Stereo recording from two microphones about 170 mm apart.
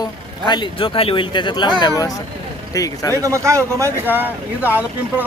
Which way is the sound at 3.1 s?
20° right (ahead or behind).